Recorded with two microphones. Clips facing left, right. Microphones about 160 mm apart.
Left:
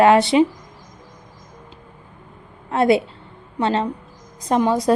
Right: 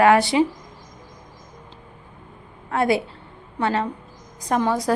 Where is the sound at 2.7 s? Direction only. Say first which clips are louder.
Left 4 dB; 25° left (ahead or behind).